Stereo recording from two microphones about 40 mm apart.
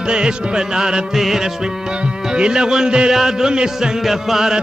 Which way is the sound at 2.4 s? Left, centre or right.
Right.